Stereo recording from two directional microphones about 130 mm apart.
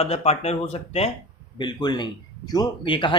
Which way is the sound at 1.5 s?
35° left (ahead or behind).